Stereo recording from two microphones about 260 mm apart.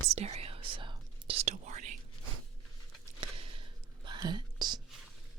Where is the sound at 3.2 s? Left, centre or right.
Right.